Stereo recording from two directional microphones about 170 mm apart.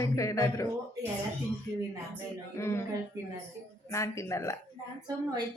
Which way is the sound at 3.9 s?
15° left (ahead or behind).